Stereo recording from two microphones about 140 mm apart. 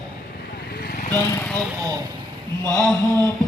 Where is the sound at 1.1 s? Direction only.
15° left (ahead or behind).